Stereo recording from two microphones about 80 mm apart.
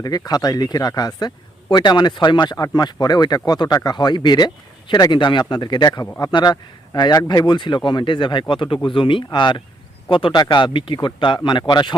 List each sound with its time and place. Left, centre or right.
0.0 s speech: left
1.7 s speech: left
10.1 s speech: left